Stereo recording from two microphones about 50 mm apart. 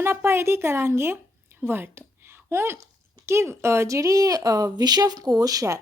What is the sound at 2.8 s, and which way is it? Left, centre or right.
Speech, right.